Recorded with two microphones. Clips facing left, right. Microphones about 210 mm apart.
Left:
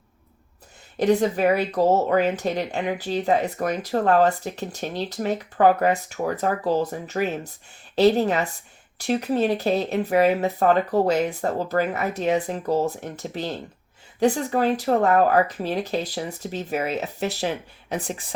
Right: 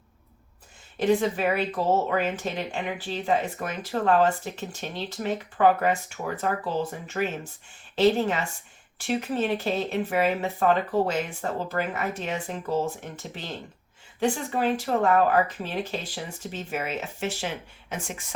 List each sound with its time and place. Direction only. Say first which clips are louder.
0.9 s speech: left 3 dB; 40° left (ahead or behind)